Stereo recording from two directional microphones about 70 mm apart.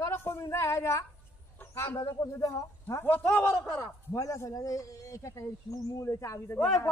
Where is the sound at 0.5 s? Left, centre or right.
Left.